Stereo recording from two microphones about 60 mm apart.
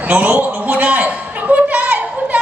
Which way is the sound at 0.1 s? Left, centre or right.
Right.